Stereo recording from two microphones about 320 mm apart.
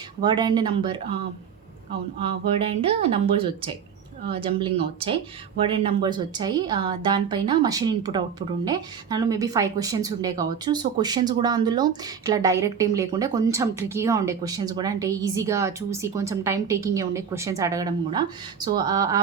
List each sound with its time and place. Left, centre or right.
0.2 s speech: centre
2.6 s speech: centre